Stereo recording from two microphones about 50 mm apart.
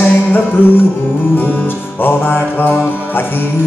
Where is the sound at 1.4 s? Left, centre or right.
Left.